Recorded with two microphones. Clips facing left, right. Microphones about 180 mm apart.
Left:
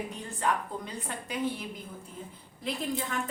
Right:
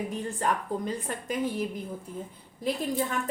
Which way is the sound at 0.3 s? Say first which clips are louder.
Even; 45° right (ahead or behind).